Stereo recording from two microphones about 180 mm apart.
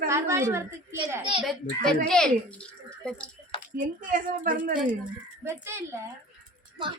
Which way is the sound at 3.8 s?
45° right (ahead or behind).